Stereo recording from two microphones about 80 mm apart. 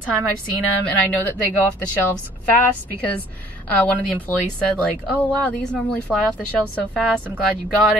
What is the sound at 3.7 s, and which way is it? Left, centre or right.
Speech, centre.